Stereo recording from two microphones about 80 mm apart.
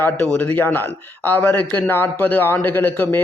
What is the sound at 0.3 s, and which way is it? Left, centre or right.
A man's voice, left.